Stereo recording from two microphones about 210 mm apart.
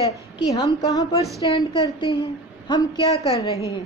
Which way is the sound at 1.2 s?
15° right (ahead or behind).